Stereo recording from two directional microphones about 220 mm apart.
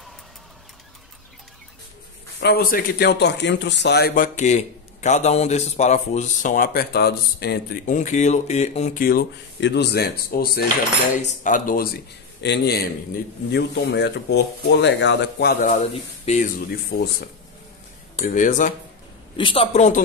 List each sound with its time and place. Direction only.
2.4 s a man's voice: 45° left (ahead or behind)
12.4 s speech: 50° left (ahead or behind)
15.8 s a man's voice: 30° left (ahead or behind)
19.3 s a man's voice: 25° left (ahead or behind)